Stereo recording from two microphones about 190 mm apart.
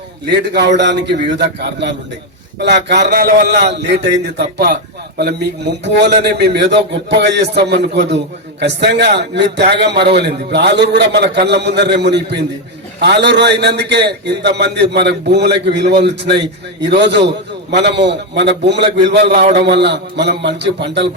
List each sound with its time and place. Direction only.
0.3 s a man's voice: 65° right (ahead or behind)
2.6 s a man's voice: 60° right (ahead or behind)
5.8 s a man's voice: 65° right (ahead or behind)